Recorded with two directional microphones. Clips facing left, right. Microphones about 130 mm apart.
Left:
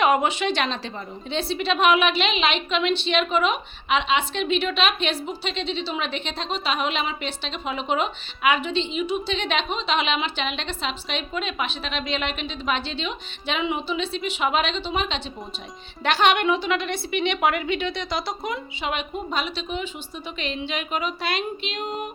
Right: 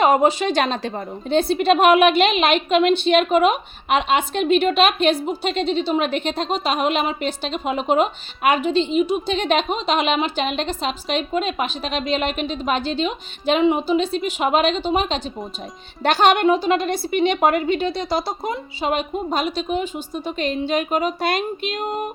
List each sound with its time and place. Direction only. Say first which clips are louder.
0.0 s a woman's voice: right 4 dB; 35° right (ahead or behind)